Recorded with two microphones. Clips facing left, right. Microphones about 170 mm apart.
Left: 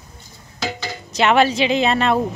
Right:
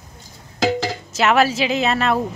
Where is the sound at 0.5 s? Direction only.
90° right.